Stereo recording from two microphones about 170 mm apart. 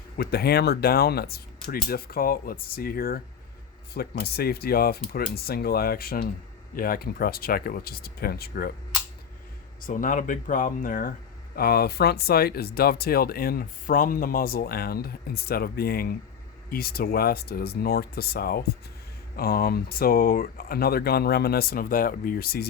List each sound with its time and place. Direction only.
0.2 s speech: 65° left (ahead or behind)
9.8 s speech: 50° left (ahead or behind)
11.5 s speech: 65° left (ahead or behind)